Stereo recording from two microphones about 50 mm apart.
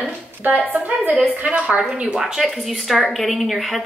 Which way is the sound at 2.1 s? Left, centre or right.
Centre.